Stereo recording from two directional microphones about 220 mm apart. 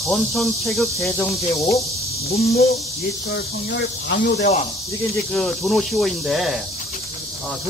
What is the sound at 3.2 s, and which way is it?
Speech, 45° left (ahead or behind).